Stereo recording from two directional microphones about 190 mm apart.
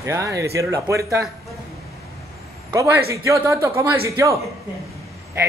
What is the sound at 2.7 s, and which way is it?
A man's voice, 15° right (ahead or behind).